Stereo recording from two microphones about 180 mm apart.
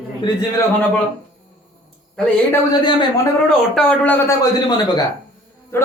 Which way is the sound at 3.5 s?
5° left (ahead or behind).